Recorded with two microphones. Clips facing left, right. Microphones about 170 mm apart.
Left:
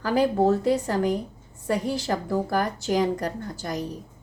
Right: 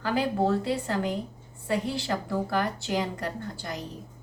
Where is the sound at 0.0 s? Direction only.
40° left (ahead or behind).